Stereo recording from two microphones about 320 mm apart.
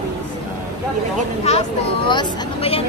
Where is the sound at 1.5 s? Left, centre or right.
Centre.